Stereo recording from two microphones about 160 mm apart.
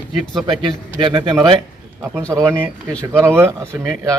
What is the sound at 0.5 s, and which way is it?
Speech, 30° right (ahead or behind).